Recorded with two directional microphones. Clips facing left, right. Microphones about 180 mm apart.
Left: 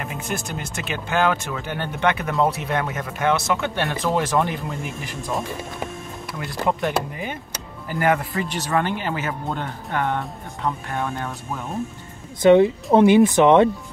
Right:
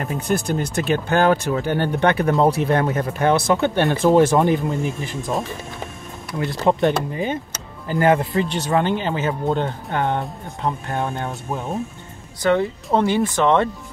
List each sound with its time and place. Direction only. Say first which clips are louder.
0.0 s speech: right 6 dB; 35° right (ahead or behind)
6.3 s speech: right 5 dB; 30° right (ahead or behind)
12.4 s speech: left 6 dB; 20° left (ahead or behind)